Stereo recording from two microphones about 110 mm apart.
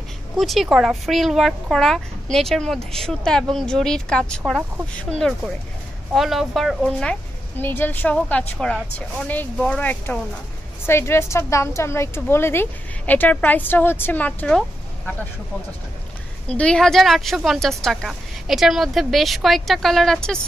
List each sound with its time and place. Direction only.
0.4 s speech: centre (ahead or behind)
6.1 s a woman's voice: centre (ahead or behind); by 14.5 s 15° left (ahead or behind)
16.4 s speech: 10° left (ahead or behind)